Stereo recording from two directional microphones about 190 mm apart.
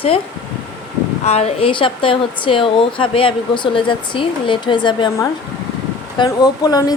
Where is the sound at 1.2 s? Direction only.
35° left (ahead or behind).